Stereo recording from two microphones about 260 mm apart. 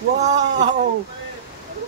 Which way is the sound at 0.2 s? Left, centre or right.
Right.